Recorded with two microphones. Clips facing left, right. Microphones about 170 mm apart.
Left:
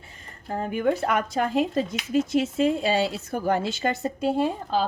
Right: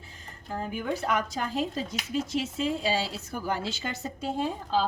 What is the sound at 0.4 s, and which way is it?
Speech, 60° left (ahead or behind).